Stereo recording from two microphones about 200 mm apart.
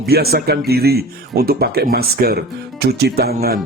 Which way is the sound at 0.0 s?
50° right (ahead or behind).